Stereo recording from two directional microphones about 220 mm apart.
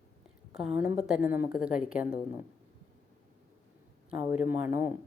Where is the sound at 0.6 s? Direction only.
5° right (ahead or behind).